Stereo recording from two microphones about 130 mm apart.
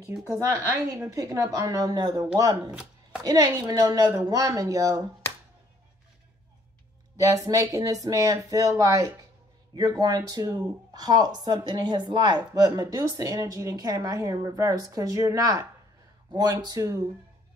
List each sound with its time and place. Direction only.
0.2 s speech: 25° right (ahead or behind)
2.7 s chopping: 10° right (ahead or behind)
3.3 s speech: 30° right (ahead or behind)
7.2 s speech: 25° right (ahead or behind)